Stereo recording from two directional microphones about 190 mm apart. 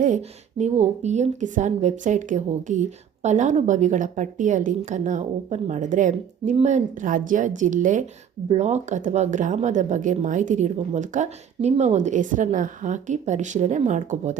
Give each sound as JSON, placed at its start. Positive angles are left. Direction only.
{"t": 0.0, "sound": "speech", "side_deg": -40}